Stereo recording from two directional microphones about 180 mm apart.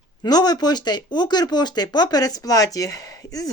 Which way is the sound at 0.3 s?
20° left (ahead or behind).